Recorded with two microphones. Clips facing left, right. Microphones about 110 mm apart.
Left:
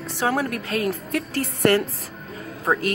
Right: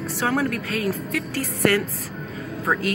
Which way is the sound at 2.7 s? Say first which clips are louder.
Left 2 dB; 15° left (ahead or behind).